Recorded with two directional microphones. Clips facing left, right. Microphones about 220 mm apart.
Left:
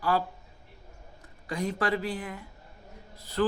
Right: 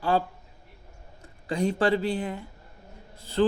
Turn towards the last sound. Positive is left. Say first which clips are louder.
# right 4 dB
turn(degrees=-25)  # may be behind; listen again after turning